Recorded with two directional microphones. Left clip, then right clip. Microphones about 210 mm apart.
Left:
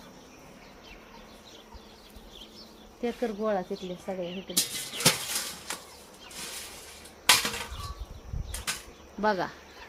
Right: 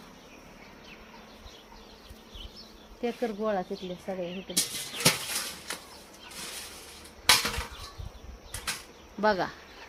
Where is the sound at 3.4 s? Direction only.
5° right (ahead or behind).